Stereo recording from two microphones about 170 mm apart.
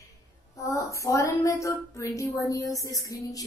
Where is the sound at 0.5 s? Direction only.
20° left (ahead or behind).